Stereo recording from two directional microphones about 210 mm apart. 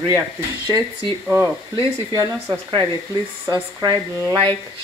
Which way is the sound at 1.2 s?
10° right (ahead or behind).